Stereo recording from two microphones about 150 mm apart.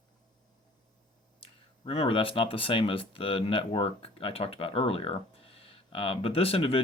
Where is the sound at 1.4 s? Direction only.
40° left (ahead or behind).